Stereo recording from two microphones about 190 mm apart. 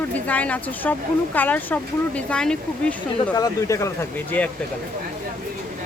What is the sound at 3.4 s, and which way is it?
Speech, 20° left (ahead or behind).